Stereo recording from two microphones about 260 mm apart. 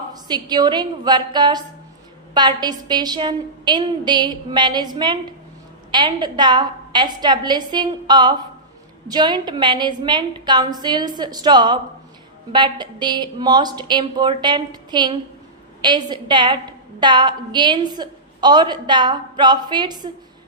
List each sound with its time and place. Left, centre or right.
0.1 s a woman's voice: centre